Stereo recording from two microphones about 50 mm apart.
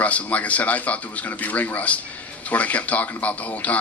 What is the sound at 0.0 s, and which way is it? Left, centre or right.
A man's voice, left.